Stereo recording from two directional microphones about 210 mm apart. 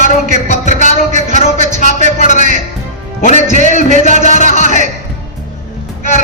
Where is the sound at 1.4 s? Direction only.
30° left (ahead or behind).